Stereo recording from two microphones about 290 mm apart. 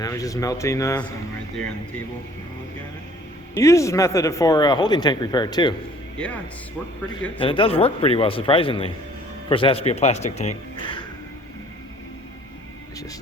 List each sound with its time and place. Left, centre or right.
0.0 s speech: centre
3.5 s speech: centre
6.1 s speech: centre
7.3 s a man's voice: centre